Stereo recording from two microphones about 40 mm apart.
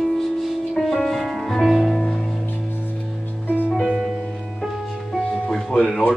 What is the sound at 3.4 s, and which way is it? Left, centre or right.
Music, right.